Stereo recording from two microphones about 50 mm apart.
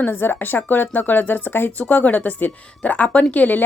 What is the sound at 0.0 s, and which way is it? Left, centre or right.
Speech, left.